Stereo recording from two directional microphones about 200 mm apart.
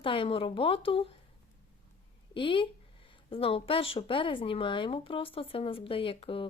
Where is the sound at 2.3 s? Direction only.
25° left (ahead or behind).